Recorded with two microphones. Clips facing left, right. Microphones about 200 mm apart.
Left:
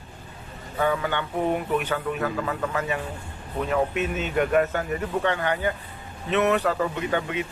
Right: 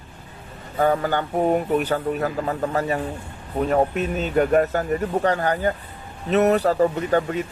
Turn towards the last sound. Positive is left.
turn(degrees=-40)  # may be behind; listen again after turning